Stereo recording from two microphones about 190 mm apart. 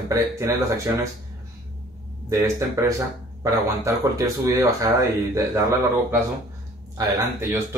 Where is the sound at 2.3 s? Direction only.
15° right (ahead or behind).